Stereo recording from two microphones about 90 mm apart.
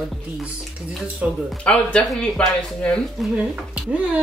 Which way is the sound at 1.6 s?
10° left (ahead or behind).